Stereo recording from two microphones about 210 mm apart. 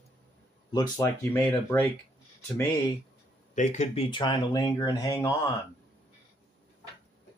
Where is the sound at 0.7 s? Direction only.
15° left (ahead or behind).